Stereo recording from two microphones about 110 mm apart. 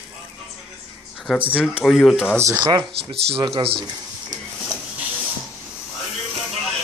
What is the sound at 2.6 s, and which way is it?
Speech, 40° right (ahead or behind).